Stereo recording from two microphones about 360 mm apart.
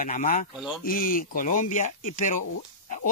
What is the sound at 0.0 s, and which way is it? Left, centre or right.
Speech, left.